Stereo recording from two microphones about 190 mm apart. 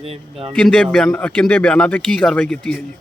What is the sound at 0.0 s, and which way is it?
Speech, 30° right (ahead or behind).